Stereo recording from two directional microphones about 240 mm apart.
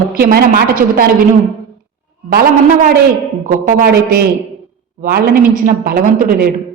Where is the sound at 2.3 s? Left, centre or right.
Right.